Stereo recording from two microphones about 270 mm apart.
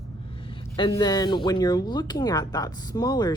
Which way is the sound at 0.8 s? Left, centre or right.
Centre.